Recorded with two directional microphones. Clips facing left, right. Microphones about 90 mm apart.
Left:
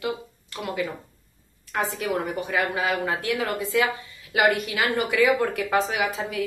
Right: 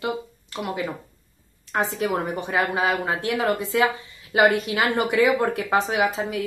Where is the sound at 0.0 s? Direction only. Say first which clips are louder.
Right 2 dB; 25° right (ahead or behind).